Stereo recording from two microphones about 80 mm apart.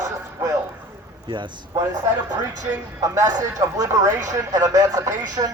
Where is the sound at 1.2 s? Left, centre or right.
Right.